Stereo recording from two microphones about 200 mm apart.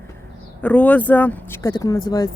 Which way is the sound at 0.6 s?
5° left (ahead or behind).